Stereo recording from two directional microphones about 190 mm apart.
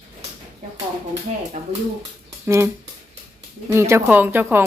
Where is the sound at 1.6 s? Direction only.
35° right (ahead or behind).